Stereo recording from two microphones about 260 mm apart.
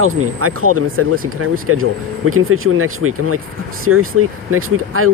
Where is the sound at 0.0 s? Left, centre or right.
Right.